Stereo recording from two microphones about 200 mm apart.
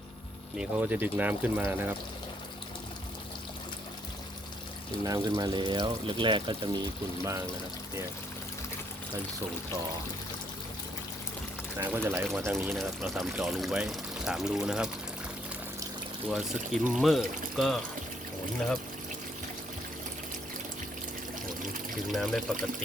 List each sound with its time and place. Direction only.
0.5 s speech: 5° right (ahead or behind)
5.0 s speech: 20° right (ahead or behind)
11.8 s speech: 10° right (ahead or behind)
16.3 s speech: 5° right (ahead or behind)
22.1 s speech: centre (ahead or behind)